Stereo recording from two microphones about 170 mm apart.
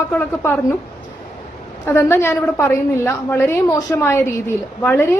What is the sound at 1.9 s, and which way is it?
A woman's voice, 15° left (ahead or behind).